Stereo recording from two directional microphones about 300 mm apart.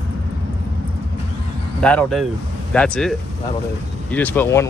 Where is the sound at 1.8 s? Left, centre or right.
Centre.